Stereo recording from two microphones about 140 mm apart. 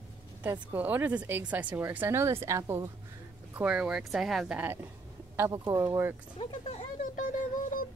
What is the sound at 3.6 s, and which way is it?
Speech, 5° right (ahead or behind).